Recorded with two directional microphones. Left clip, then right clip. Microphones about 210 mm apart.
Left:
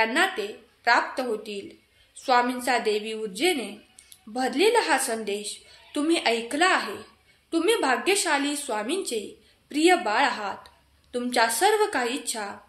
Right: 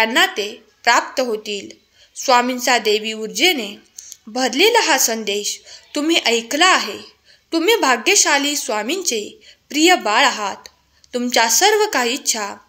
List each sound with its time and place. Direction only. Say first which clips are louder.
0.0 s speech: right 7 dB; 35° right (ahead or behind)